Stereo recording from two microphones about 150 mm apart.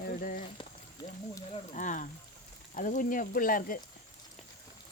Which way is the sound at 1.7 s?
60° left (ahead or behind).